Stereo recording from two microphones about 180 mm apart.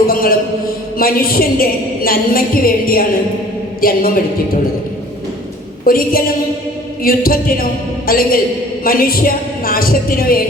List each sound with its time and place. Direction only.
0.1 s a sound: 55° left (ahead or behind)
0.9 s a woman's voice: 55° left (ahead or behind)
5.8 s a woman's voice: 55° left (ahead or behind)